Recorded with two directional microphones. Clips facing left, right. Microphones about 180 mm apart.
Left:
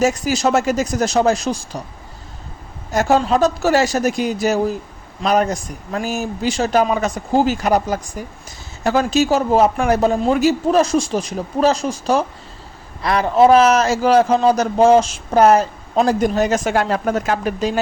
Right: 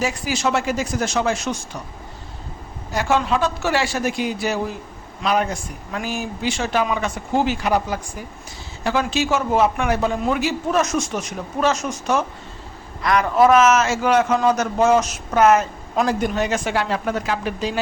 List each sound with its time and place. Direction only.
0.0 s a man's voice: 45° left (ahead or behind)
2.9 s a man's voice: 40° left (ahead or behind)